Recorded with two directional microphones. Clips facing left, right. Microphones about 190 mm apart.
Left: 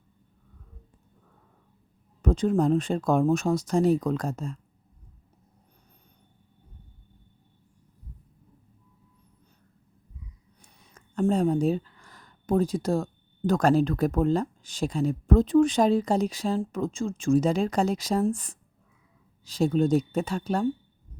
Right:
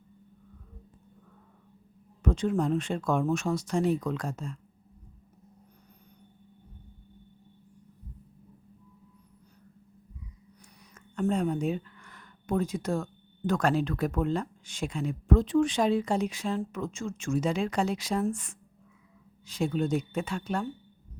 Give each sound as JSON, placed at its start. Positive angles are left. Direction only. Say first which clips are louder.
{"t": 2.2, "sound": "speech", "louder": "left 4 dB", "side_deg": 40}
{"t": 10.9, "sound": "a sound", "louder": "left 4 dB", "side_deg": 35}
{"t": 13.5, "sound": "speech", "louder": "left 5 dB", "side_deg": 40}
{"t": 19.5, "sound": "speech", "louder": "left 5 dB", "side_deg": 40}